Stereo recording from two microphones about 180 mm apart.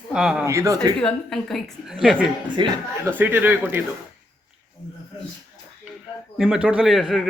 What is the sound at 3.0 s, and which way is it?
Speech, 10° right (ahead or behind).